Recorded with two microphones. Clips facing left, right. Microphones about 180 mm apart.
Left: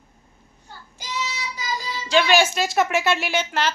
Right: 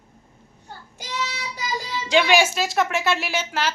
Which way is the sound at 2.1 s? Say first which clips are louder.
Even; 15° right (ahead or behind).